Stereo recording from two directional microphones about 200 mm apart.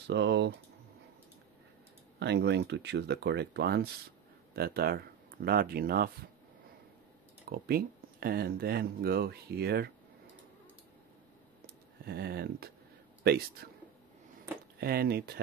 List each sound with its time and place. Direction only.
0.0 s speech: 60° right (ahead or behind)
2.1 s speech: 60° right (ahead or behind)
7.4 s speech: 50° right (ahead or behind)
11.6 s a sound: 50° right (ahead or behind)
13.2 s speech: 50° right (ahead or behind)
14.8 s speech: 50° right (ahead or behind)